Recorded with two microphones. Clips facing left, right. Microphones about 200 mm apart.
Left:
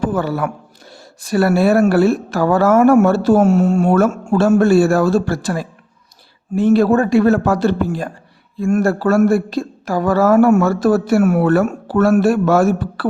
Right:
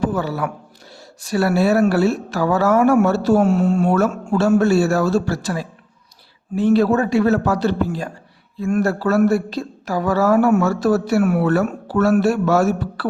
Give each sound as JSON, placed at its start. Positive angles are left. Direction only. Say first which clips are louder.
{"t": 0.0, "sound": "speech", "louder": "left 2 dB", "side_deg": 55}